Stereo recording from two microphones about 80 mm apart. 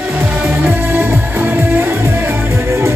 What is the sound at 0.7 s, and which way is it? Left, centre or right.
Music, right.